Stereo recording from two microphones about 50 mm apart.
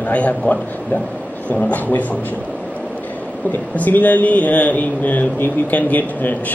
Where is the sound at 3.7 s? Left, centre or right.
Left.